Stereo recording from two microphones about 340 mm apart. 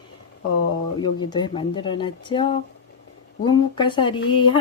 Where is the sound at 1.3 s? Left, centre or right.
Centre.